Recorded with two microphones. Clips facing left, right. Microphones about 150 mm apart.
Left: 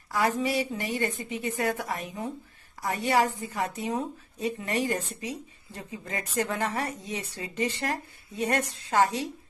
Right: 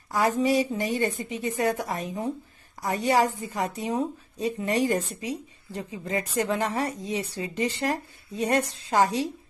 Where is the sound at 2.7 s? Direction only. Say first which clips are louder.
Right 3 dB; 25° right (ahead or behind).